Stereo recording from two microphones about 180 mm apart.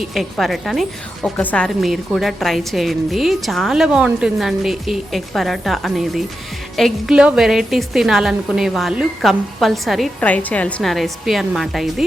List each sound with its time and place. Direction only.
0.0 s a woman's voice: centre (ahead or behind)